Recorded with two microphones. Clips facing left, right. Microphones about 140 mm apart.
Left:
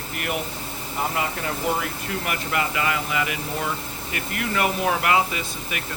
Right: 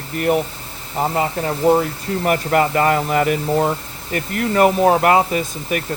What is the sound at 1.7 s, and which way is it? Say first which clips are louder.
Speech: right 12 dB; 35° right (ahead or behind).